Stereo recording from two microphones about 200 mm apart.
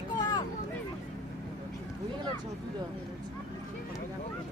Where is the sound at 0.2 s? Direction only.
20° left (ahead or behind).